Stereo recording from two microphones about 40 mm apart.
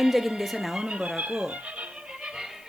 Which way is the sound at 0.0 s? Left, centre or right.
Centre.